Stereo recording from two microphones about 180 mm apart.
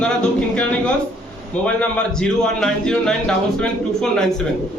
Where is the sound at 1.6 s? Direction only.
5° left (ahead or behind).